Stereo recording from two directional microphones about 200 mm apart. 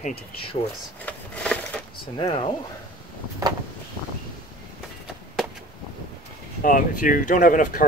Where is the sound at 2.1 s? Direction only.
30° left (ahead or behind).